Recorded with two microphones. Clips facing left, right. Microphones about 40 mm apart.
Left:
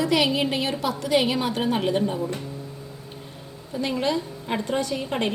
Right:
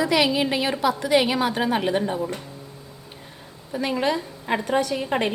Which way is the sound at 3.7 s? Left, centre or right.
Right.